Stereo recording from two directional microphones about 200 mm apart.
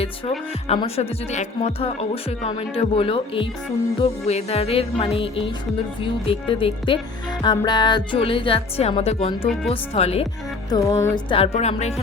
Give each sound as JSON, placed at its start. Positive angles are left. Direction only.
{"t": 0.7, "sound": "speech", "side_deg": 30}
{"t": 10.7, "sound": "speech", "side_deg": 15}